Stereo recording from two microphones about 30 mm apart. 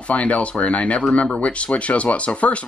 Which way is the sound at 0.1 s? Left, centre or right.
Left.